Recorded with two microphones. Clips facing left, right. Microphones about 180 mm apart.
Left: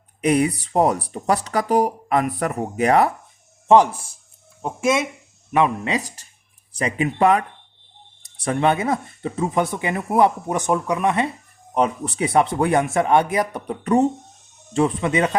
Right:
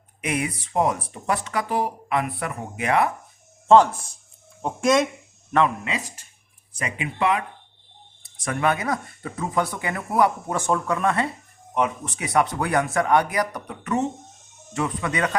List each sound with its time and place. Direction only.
0.2 s speech: 35° left (ahead or behind)
3.7 s speech: 10° left (ahead or behind)
5.8 s speech: 40° left (ahead or behind)
8.2 s speech: 30° left (ahead or behind)
11.7 s speech: 35° left (ahead or behind)